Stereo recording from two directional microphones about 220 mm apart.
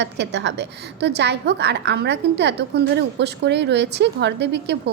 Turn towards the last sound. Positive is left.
turn(degrees=-50)  # may be behind; listen again after turning